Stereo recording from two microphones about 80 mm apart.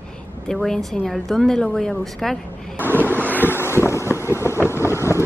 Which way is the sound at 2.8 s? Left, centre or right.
Right.